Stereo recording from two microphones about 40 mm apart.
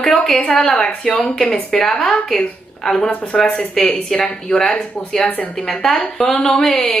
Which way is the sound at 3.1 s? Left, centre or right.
Left.